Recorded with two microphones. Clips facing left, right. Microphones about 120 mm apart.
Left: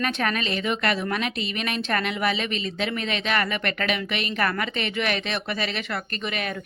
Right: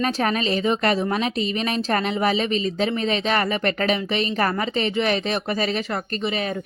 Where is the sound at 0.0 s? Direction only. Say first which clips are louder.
Right 4 dB; 35° right (ahead or behind).